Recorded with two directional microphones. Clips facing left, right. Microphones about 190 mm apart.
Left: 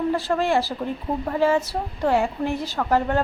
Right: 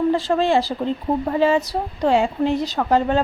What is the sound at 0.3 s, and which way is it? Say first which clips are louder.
A woman's voice: right 3 dB; 20° right (ahead or behind).